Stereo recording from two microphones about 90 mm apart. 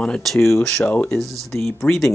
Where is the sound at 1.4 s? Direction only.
5° left (ahead or behind).